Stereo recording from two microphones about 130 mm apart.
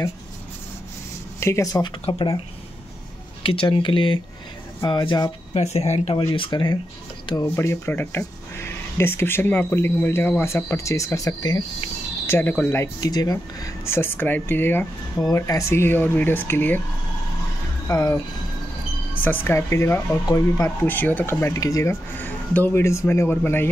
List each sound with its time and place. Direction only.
1.4 s speech: 25° left (ahead or behind)
3.4 s speech: 40° left (ahead or behind)
5.5 s speech: 55° left (ahead or behind); by 6.8 s 35° left (ahead or behind)
7.4 s speech: 20° left (ahead or behind)
12.3 s speech: 15° left (ahead or behind)
17.8 s speech: 25° left (ahead or behind)
19.2 s speech: 15° left (ahead or behind)
20.9 s speech: 15° left (ahead or behind)
22.2 s speech: 15° left (ahead or behind)